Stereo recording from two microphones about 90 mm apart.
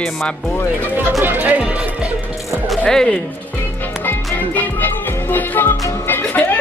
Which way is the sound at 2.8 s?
10° left (ahead or behind).